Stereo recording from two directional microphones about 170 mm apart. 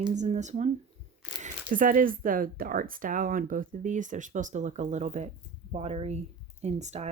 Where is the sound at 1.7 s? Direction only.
50° right (ahead or behind).